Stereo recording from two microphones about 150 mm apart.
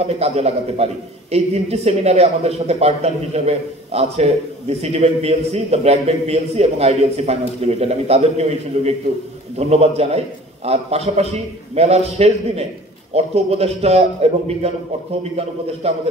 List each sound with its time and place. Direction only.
0.0 s speech: 40° right (ahead or behind)
15.8 s speech: 45° right (ahead or behind)